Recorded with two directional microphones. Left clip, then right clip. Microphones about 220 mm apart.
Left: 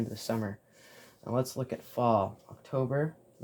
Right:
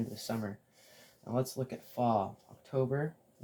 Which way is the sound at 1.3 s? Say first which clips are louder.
Left 3 dB; 45° left (ahead or behind).